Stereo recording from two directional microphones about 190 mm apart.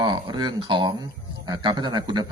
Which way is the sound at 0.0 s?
20° right (ahead or behind).